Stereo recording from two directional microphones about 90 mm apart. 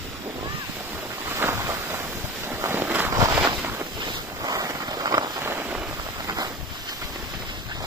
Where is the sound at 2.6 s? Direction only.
25° right (ahead or behind).